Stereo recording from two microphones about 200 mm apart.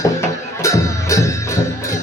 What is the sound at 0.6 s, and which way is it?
Music, 15° left (ahead or behind).